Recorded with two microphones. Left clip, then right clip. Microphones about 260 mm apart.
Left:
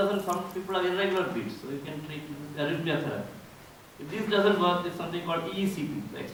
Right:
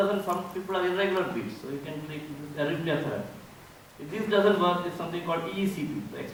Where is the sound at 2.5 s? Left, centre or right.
Centre.